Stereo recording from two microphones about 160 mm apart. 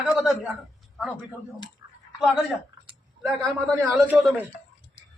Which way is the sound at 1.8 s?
25° right (ahead or behind).